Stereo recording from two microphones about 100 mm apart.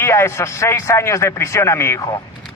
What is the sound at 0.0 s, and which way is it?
A man's voice, 25° left (ahead or behind).